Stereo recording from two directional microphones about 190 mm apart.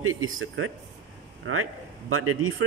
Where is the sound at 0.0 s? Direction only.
90° right.